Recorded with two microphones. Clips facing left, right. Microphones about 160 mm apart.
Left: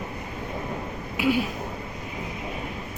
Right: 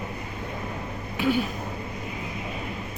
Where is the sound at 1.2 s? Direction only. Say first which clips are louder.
Left 1 dB; 5° left (ahead or behind).